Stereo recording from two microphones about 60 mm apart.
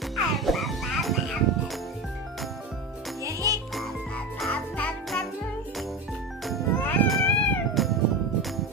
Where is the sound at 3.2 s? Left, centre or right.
Right.